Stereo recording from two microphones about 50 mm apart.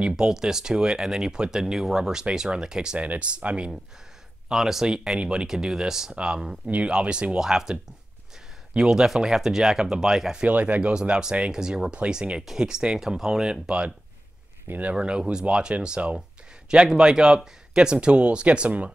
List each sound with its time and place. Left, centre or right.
0.1 s speech: centre
3.0 s speech: right
4.5 s speech: centre
7.3 s speech: centre
8.7 s speech: centre
10.4 s speech: right
14.7 s speech: right
15.0 s speech: right